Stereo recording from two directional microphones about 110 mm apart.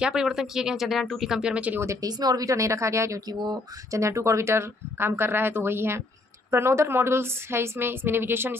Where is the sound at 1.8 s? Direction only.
30° right (ahead or behind).